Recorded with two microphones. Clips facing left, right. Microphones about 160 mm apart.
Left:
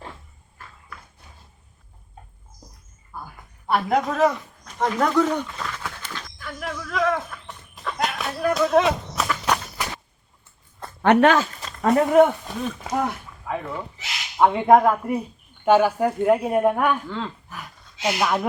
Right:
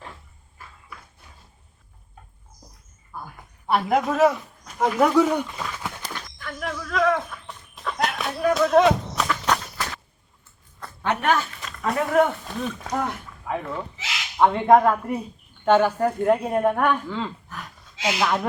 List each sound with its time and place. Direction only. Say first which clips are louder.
3.7 s speech: even; centre (ahead or behind)
6.4 s a sound: right 1 dB; centre (ahead or behind)
11.0 s speech: left 7 dB; 75° left (ahead or behind)
11.6 s a sound: left 6 dB; 35° left (ahead or behind)
12.1 s speech: left 4 dB; 15° left (ahead or behind); by 17.3 s centre (ahead or behind)
18.2 s speech: even; 10° left (ahead or behind)